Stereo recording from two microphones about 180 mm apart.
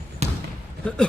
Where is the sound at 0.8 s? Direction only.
5° left (ahead or behind).